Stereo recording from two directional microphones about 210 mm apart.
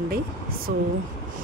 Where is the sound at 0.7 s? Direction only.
45° right (ahead or behind).